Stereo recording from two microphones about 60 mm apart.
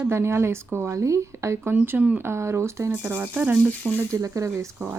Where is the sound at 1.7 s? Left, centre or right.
Right.